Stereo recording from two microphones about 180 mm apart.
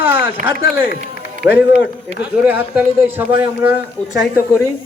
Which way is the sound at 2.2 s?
10° right (ahead or behind).